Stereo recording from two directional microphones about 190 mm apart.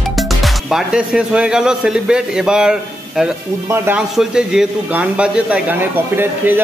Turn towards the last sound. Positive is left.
turn(degrees=-10)  # may be behind; listen again after turning